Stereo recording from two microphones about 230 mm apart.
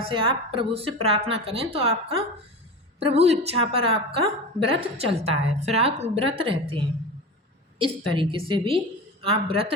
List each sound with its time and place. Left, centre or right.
0.0 s a woman's voice: right